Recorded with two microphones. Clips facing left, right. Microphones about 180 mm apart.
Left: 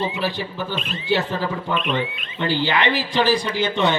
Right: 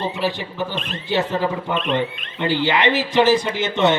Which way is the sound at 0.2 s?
20° right (ahead or behind).